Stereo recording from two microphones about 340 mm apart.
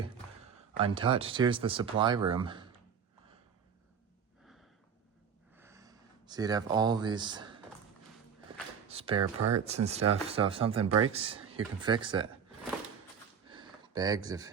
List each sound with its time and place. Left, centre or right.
0.8 s speech: centre
5.5 s a sound: centre
8.9 s speech: centre
9.2 s speech: right
9.6 s speech: centre
13.5 s a sound: centre